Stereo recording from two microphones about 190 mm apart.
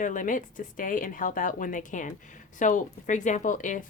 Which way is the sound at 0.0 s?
45° left (ahead or behind).